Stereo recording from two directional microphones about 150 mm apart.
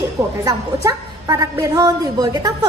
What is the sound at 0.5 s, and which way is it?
A woman's voice, 25° right (ahead or behind).